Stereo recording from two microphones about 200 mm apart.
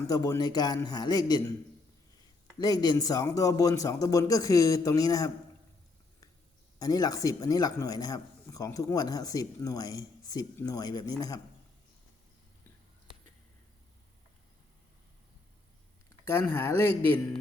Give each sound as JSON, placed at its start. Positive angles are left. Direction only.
{"t": 0.1, "sound": "a man's voice", "side_deg": 20}
{"t": 2.6, "sound": "speech", "side_deg": 20}
{"t": 6.7, "sound": "speech", "side_deg": 20}
{"t": 16.2, "sound": "speech", "side_deg": 10}